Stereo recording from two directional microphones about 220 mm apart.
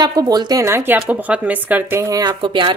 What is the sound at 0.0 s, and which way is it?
A woman's voice, 15° right (ahead or behind).